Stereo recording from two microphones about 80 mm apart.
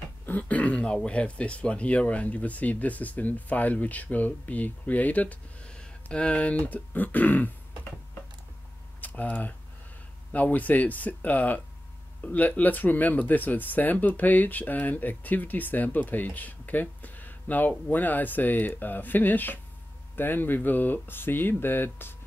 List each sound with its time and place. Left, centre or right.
0.3 s speech: centre
9.0 s speech: centre